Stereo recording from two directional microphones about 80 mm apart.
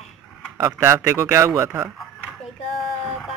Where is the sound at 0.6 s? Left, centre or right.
Right.